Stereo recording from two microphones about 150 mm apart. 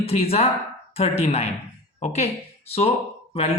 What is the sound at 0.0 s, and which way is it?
Speech, 40° left (ahead or behind).